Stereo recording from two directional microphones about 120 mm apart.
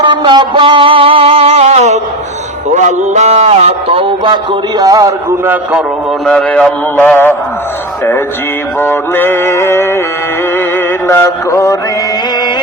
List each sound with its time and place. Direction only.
0.0 s a sound: 40° right (ahead or behind); by 2.0 s 65° right (ahead or behind)
2.7 s a man's voice: 75° right (ahead or behind); by 4.4 s 45° right (ahead or behind)
4.8 s a man's voice: 30° right (ahead or behind)
6.2 s a man's voice: 5° left (ahead or behind)
8.8 s male singing: 20° left (ahead or behind)
11.1 s male singing: 25° left (ahead or behind)